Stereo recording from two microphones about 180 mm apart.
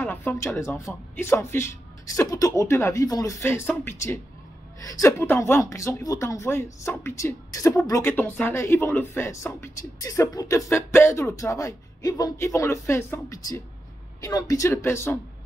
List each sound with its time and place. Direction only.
0.0 s speech: 10° left (ahead or behind)